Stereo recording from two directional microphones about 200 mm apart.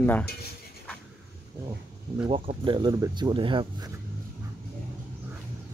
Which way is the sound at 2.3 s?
25° right (ahead or behind).